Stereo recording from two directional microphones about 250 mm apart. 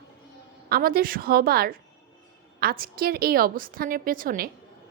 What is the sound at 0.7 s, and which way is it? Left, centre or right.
A woman's voice, right.